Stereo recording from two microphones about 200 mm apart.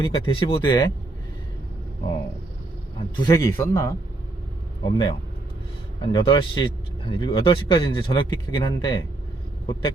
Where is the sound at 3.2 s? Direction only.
15° left (ahead or behind).